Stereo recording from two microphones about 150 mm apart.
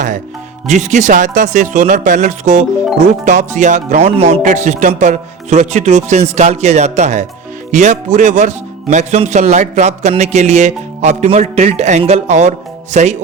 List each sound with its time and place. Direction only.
0.7 s speech: 55° right (ahead or behind)
4.1 s speech: 40° right (ahead or behind)